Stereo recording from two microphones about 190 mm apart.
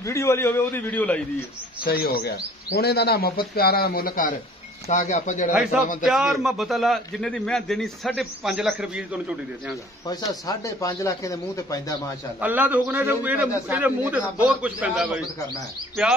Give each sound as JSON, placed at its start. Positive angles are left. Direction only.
{"t": 0.0, "sound": "speech", "side_deg": 15}
{"t": 1.9, "sound": "speech", "side_deg": 55}
{"t": 4.8, "sound": "speech", "side_deg": 35}
{"t": 5.5, "sound": "a man's voice", "side_deg": -5}
{"t": 10.0, "sound": "speech", "side_deg": 20}
{"t": 12.4, "sound": "a man's voice", "side_deg": -10}